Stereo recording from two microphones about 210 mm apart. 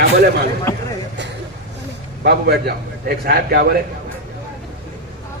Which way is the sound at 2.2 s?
45° right (ahead or behind).